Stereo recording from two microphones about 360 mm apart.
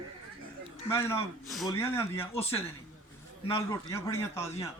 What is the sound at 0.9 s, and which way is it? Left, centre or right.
A man's voice, centre.